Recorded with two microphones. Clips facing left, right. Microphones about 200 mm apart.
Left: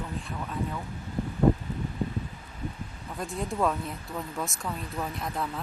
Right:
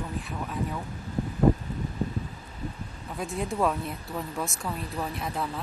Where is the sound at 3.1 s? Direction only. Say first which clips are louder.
Right 2 dB; centre (ahead or behind).